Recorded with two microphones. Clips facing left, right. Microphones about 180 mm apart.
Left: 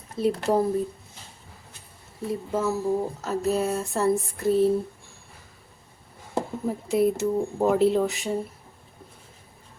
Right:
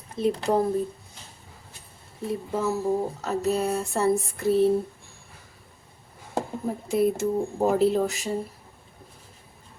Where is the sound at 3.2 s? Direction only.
Centre (ahead or behind).